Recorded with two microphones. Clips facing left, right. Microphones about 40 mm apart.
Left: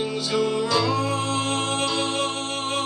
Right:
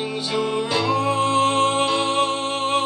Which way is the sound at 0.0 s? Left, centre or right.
Right.